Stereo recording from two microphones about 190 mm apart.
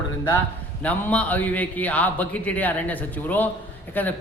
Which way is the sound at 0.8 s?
5° left (ahead or behind).